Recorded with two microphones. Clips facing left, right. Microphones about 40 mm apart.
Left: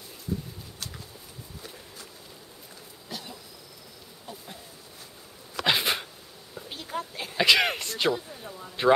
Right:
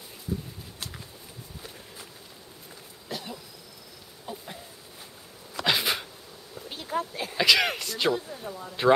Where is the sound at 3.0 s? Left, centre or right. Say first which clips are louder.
Right 3 dB; centre.